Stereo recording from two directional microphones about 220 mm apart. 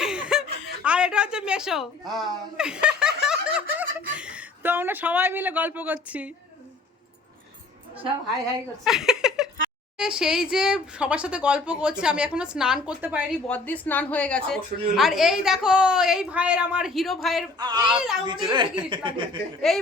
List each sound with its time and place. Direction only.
0.0 s chuckle: 5° right (ahead or behind)
4.1 s a man's voice: 5° right (ahead or behind)
8.8 s a sound: centre (ahead or behind)
10.0 s a woman's voice: 5° right (ahead or behind)
13.5 s a woman's voice: 5° left (ahead or behind)
17.6 s speech: 20° right (ahead or behind)
17.8 s a woman's voice: centre (ahead or behind)
18.3 s speech: 20° right (ahead or behind)
19.7 s a woman's voice: centre (ahead or behind)